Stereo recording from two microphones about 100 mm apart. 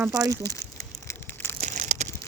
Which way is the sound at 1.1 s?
20° left (ahead or behind).